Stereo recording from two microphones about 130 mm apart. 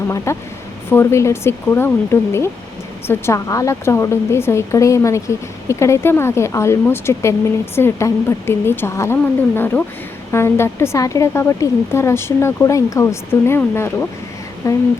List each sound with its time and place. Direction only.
0.3 s a woman's voice: 20° left (ahead or behind)